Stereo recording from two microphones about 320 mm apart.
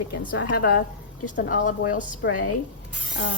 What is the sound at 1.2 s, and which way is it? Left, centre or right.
A woman's voice, left.